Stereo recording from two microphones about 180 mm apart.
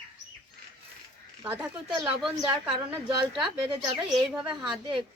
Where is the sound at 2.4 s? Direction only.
25° right (ahead or behind).